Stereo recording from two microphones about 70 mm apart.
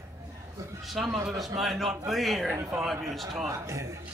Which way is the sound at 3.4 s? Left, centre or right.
Right.